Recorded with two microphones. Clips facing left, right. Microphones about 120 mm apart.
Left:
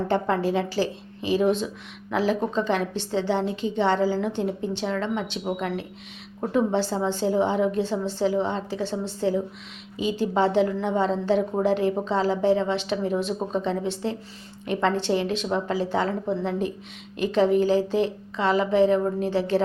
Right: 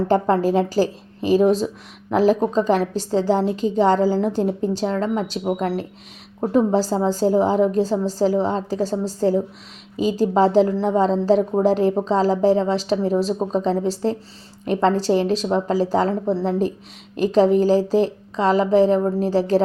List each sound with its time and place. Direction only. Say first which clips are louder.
0.1 s a woman's voice: right 6 dB; 40° right (ahead or behind)